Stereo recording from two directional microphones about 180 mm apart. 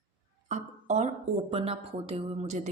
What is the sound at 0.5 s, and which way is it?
Speech, 40° right (ahead or behind).